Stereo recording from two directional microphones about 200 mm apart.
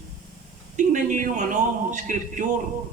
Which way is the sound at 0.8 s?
40° right (ahead or behind).